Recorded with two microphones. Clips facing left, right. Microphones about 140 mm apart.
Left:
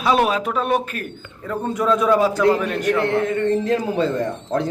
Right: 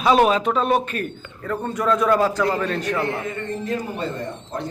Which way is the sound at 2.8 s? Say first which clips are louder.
Left 5 dB; 65° left (ahead or behind).